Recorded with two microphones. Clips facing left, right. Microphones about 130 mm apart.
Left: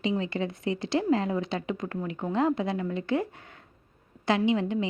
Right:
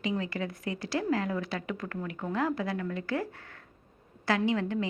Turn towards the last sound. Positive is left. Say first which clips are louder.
# left 3 dB
turn(degrees=20)  # may be behind; listen again after turning